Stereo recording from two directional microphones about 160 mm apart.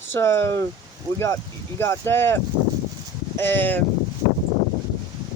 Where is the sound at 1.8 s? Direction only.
15° left (ahead or behind).